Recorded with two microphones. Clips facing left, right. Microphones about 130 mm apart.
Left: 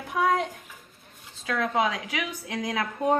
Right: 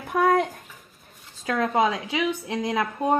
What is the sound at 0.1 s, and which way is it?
Bathtub, 55° right (ahead or behind).